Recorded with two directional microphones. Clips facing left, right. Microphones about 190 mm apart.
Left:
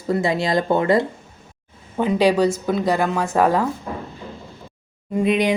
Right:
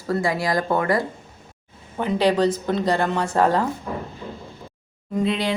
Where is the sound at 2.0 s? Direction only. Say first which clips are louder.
Left 2 dB; 10° left (ahead or behind).